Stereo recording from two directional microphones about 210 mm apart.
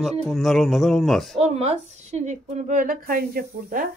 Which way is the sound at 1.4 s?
30° right (ahead or behind).